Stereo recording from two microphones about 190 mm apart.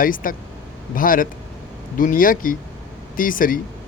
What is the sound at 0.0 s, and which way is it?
Speech, 45° left (ahead or behind).